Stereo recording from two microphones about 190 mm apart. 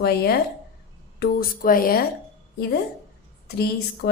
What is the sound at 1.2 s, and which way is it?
Speech, 50° left (ahead or behind).